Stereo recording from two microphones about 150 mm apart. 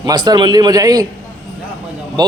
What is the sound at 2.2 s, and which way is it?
Speech, 30° right (ahead or behind).